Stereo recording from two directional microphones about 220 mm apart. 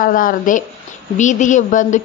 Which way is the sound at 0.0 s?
40° left (ahead or behind).